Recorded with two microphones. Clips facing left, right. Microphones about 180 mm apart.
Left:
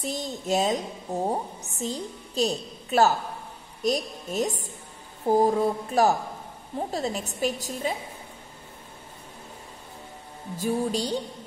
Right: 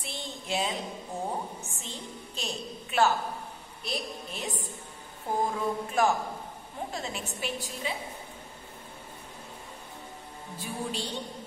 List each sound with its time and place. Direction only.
0.0 s a woman's voice: 40° left (ahead or behind)
10.6 s a woman's voice: 40° left (ahead or behind)